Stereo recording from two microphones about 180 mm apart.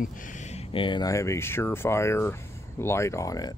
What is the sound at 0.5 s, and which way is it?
Speech, 30° left (ahead or behind).